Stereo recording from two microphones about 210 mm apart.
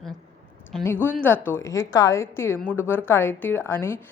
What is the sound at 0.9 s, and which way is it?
A woman's voice, 10° left (ahead or behind).